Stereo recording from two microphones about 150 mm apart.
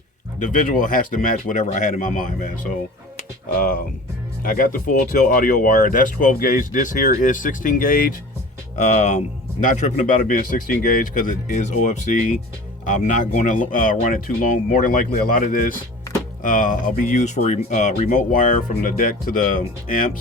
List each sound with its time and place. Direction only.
0.3 s speech: 60° left (ahead or behind)
8.8 s speech: 50° left (ahead or behind)